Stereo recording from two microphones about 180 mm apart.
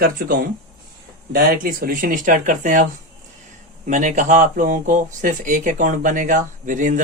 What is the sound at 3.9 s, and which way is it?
Speech, 45° right (ahead or behind).